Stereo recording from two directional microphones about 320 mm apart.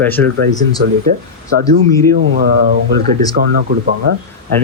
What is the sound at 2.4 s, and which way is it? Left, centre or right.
Speech, right.